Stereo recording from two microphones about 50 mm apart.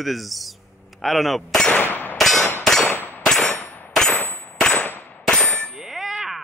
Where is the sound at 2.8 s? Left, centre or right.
Left.